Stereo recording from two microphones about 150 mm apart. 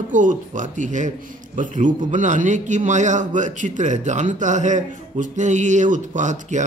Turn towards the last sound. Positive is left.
turn(degrees=-55)  # may be behind; listen again after turning